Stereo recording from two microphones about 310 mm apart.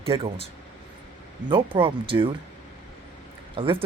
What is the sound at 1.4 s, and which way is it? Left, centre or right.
Speech, centre.